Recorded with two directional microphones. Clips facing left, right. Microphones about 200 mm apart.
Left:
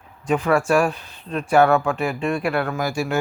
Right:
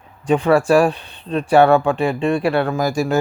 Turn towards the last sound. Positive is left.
turn(degrees=-40)  # may be behind; listen again after turning